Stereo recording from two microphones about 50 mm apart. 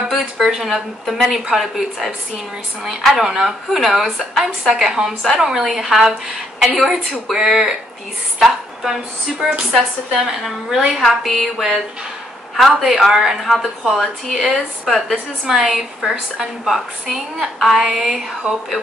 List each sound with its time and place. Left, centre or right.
0.2 s a woman's voice: centre
12.5 s a woman's voice: centre
15.4 s a woman's voice: centre
18.4 s speech: right